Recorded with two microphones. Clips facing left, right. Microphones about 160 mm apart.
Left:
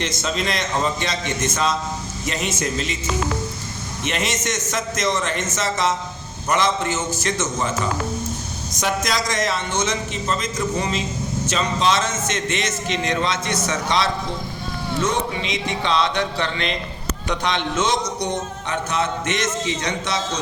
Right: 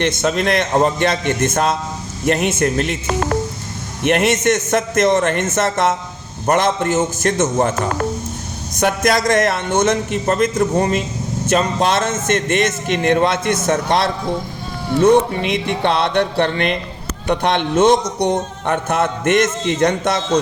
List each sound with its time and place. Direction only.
0.0 s a man's voice: 60° right (ahead or behind)